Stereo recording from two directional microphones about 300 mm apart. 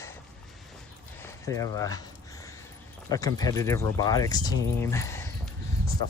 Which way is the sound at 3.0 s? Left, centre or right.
Centre.